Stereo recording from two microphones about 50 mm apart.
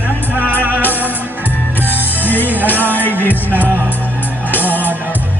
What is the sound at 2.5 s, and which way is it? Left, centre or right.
Music, right.